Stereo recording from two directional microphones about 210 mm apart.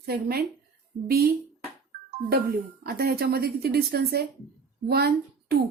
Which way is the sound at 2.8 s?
50° right (ahead or behind).